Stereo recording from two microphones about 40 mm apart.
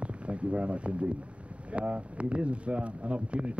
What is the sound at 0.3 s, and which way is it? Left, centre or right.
Speech, right.